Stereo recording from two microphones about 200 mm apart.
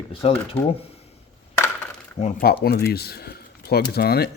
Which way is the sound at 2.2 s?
50° left (ahead or behind).